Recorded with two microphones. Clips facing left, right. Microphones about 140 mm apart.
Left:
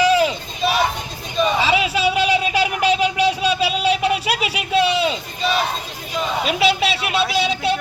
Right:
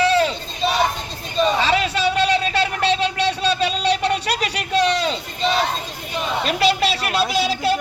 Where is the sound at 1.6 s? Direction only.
5° left (ahead or behind).